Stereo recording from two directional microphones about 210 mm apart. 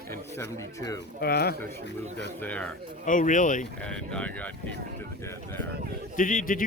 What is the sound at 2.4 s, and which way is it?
Speech, 5° left (ahead or behind).